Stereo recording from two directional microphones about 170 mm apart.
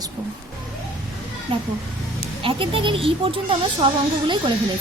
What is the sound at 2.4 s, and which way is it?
A woman's voice, 30° right (ahead or behind).